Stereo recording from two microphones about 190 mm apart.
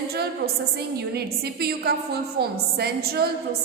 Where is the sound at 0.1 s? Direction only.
55° right (ahead or behind).